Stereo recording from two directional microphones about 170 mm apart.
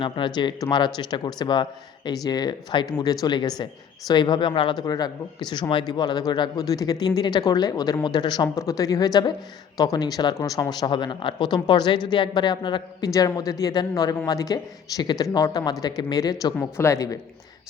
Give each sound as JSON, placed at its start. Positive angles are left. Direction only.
{"t": 0.0, "sound": "speech", "side_deg": 25}